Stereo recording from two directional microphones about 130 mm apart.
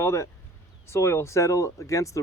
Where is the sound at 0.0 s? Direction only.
20° left (ahead or behind).